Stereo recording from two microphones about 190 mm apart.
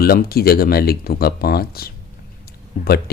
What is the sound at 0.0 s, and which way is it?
Speech, 55° left (ahead or behind).